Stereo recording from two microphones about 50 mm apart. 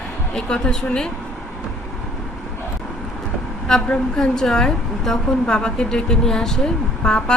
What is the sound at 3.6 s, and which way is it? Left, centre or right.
Speech, centre.